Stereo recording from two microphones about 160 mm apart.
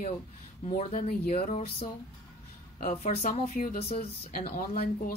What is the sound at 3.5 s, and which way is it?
Speech, 60° left (ahead or behind).